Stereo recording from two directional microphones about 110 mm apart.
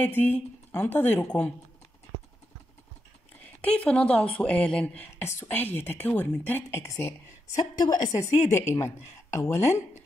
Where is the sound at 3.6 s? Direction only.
10° left (ahead or behind).